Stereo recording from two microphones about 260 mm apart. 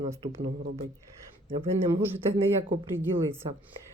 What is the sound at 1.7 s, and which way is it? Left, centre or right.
Speech, centre.